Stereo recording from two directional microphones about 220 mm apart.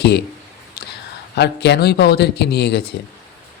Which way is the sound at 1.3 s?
50° left (ahead or behind).